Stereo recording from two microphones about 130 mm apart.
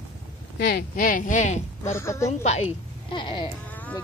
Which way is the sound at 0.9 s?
90° left.